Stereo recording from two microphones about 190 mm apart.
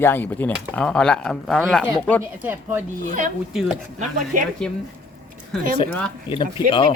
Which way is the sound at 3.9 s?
45° right (ahead or behind).